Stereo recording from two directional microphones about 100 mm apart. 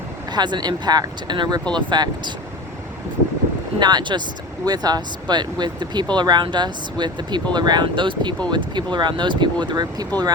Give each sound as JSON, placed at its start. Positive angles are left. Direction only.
{"t": 0.3, "sound": "speech", "side_deg": -45}
{"t": 3.8, "sound": "speech", "side_deg": -45}
{"t": 9.6, "sound": "speech", "side_deg": -40}